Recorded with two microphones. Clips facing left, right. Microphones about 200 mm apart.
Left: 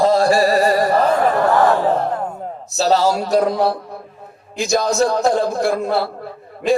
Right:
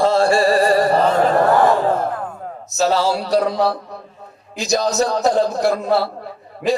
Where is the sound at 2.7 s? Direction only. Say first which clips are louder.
Left 1 dB; 40° left (ahead or behind).